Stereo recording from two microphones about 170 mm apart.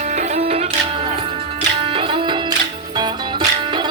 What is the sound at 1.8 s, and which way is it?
Music, 30° right (ahead or behind).